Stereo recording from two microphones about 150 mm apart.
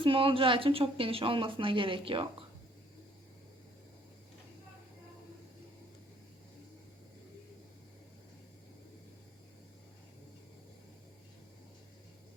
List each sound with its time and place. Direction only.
0.0 s a woman's voice: 35° right (ahead or behind)